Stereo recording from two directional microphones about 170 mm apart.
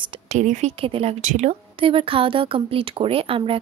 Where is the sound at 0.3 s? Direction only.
45° right (ahead or behind).